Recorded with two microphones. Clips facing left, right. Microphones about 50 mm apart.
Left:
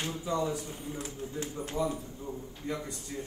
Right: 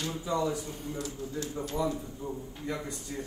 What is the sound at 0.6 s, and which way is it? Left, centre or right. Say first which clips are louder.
A man's voice: right 2 dB; left.